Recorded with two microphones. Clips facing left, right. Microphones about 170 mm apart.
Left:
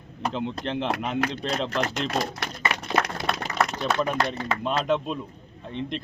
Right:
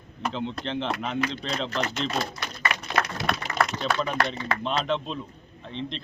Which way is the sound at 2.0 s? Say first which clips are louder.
Left 2 dB; 75° left (ahead or behind).